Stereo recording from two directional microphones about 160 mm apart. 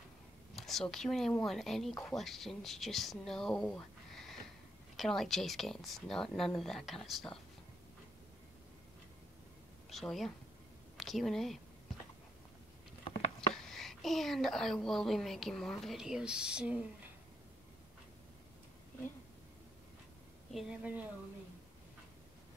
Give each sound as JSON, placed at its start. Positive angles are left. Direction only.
{"t": 0.6, "sound": "a woman's voice", "side_deg": 0}
{"t": 9.8, "sound": "speech", "side_deg": 0}
{"t": 13.0, "sound": "patter", "side_deg": 40}
{"t": 13.6, "sound": "a woman's voice", "side_deg": 0}
{"t": 20.5, "sound": "a woman's voice", "side_deg": -10}